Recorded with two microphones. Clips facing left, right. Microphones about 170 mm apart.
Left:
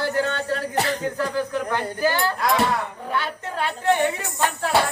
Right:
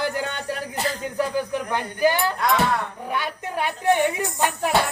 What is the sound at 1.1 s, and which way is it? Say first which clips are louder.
Speech: even; 15° right (ahead or behind).